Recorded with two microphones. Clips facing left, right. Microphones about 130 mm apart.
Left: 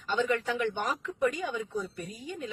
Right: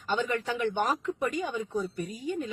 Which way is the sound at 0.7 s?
40° right (ahead or behind).